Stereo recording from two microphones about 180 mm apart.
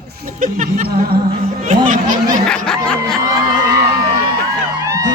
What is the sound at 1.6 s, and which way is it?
Speech, 45° right (ahead or behind).